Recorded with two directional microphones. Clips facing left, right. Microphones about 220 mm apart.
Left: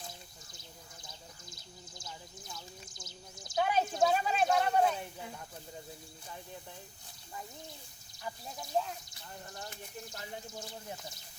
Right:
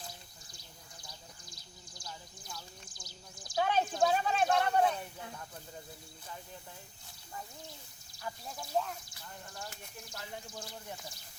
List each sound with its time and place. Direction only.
2.0 s a sound: 25° left (ahead or behind)
3.6 s a woman's voice: 5° left (ahead or behind)
8.2 s speech: 20° left (ahead or behind)